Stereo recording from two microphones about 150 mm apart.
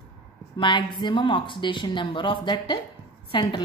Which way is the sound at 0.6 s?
30° left (ahead or behind).